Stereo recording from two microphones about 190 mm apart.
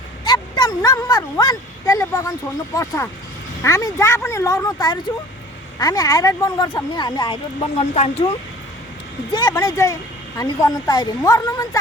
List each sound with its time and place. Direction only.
0.3 s a sound: 20° left (ahead or behind)
2.7 s speech: 15° left (ahead or behind); by 8.1 s 30° left (ahead or behind)
9.3 s speech: 20° left (ahead or behind)